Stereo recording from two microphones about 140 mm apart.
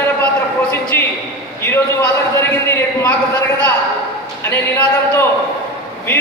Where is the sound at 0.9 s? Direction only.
15° left (ahead or behind).